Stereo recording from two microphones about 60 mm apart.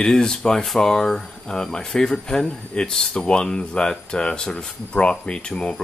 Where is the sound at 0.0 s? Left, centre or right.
Centre.